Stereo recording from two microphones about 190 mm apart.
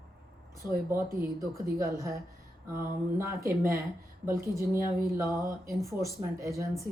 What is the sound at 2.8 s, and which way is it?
A woman's voice, 15° right (ahead or behind).